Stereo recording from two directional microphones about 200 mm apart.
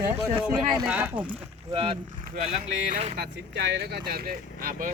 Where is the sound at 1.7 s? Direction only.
25° right (ahead or behind).